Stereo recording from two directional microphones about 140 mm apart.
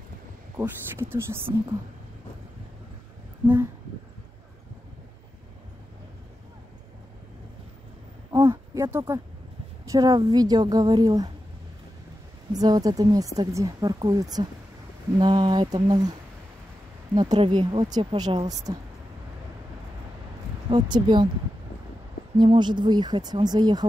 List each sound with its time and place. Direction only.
0.6 s speech: 15° right (ahead or behind)
8.3 s a sound: 25° right (ahead or behind)
9.8 s speech: 25° right (ahead or behind)
12.5 s speech: 25° right (ahead or behind)
20.7 s speech: 30° right (ahead or behind)
22.4 s speech: 35° right (ahead or behind)